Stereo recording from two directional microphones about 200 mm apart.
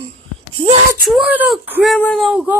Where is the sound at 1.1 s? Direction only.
5° right (ahead or behind).